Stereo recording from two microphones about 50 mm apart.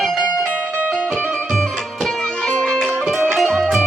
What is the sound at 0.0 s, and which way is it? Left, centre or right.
Music, centre.